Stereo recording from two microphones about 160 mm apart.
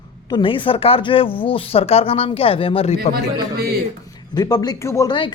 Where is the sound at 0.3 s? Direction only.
30° left (ahead or behind).